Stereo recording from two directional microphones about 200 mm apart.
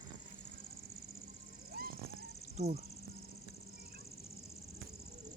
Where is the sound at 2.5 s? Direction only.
35° right (ahead or behind).